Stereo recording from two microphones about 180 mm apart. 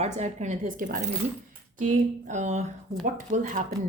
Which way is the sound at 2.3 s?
40° right (ahead or behind).